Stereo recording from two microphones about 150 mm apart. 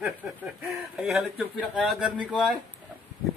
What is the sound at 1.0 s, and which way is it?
Speech, centre (ahead or behind).